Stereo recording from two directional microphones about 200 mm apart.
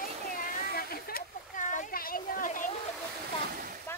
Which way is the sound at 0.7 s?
45° left (ahead or behind).